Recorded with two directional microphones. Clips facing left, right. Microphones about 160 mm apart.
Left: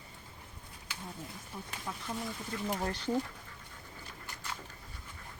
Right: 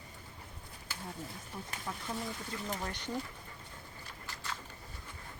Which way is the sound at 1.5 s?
5° left (ahead or behind).